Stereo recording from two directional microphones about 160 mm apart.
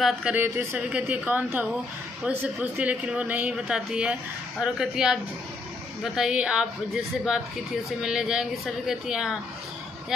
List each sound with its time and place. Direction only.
0.0 s speech: 5° right (ahead or behind)